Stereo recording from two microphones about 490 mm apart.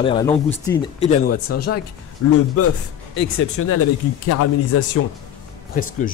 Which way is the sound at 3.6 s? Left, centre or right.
Left.